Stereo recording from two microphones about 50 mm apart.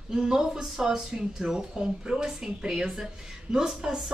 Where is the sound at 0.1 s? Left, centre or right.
Centre.